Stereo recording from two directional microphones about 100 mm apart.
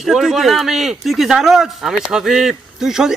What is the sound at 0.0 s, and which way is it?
A man's voice, 5° right (ahead or behind).